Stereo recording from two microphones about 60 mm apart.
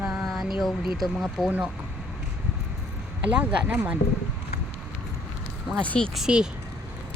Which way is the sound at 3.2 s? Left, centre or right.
Right.